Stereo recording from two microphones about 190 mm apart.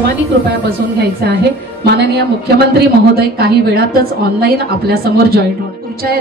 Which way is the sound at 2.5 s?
55° right (ahead or behind).